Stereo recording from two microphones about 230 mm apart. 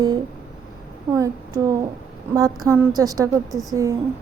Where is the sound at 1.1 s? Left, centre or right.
Centre.